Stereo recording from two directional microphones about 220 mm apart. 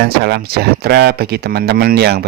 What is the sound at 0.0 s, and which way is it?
Speech, 50° right (ahead or behind).